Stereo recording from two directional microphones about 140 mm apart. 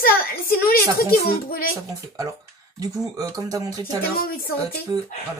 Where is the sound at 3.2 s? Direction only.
25° right (ahead or behind).